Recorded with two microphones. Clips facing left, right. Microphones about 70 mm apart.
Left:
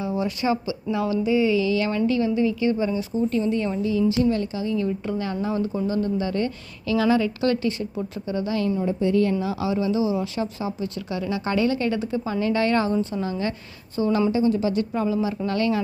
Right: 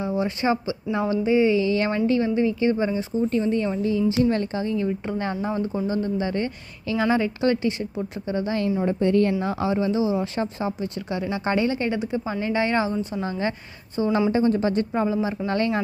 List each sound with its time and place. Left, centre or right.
0.0 s a woman's voice: right
8.8 s a woman's voice: right
12.9 s a woman's voice: centre
13.9 s a woman's voice: right
14.3 s a woman's voice: right